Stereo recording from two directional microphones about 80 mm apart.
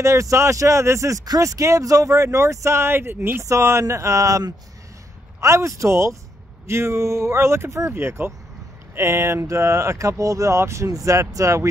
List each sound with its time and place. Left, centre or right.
0.0 s speech: right